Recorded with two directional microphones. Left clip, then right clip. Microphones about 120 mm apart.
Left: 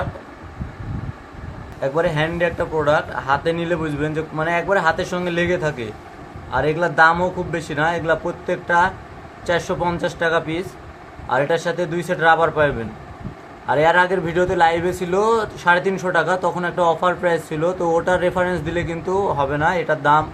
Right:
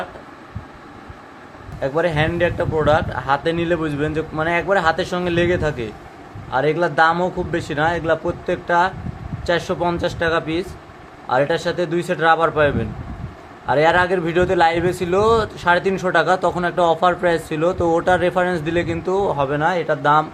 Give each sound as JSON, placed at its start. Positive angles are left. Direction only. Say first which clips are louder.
{"t": 1.8, "sound": "a man's voice", "louder": "right 1 dB", "side_deg": -55}